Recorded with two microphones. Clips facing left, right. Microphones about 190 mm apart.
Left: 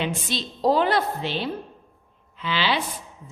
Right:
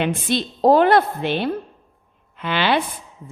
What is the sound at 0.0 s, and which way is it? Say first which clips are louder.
A woman's voice: right 6 dB; 55° right (ahead or behind).